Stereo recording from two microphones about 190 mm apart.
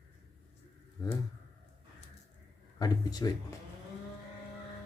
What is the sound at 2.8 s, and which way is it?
Speech, 20° left (ahead or behind).